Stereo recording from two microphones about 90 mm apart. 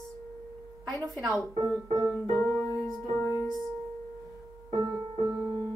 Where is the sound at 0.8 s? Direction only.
40° right (ahead or behind).